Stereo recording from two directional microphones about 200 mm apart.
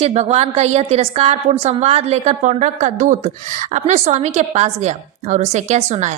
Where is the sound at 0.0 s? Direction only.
30° right (ahead or behind).